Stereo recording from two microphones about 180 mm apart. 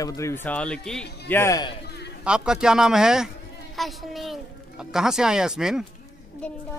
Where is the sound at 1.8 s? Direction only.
65° left (ahead or behind).